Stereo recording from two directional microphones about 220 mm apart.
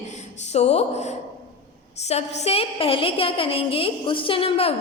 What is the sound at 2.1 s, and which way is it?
A woman's voice, 25° left (ahead or behind).